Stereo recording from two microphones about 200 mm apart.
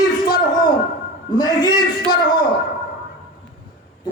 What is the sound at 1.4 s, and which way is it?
Speech, 20° left (ahead or behind).